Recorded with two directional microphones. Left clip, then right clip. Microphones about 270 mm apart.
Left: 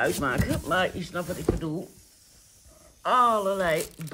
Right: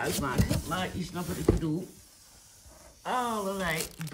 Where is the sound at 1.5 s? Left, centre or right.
Right.